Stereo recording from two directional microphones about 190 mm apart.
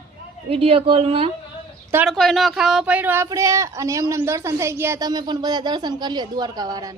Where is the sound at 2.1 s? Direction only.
Centre (ahead or behind); by 6.9 s 20° right (ahead or behind).